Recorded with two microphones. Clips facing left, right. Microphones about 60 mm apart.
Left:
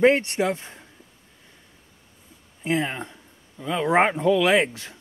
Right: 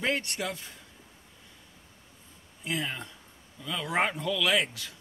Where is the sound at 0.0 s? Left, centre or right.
Left.